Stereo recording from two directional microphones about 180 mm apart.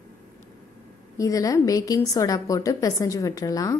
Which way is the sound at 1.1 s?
20° left (ahead or behind).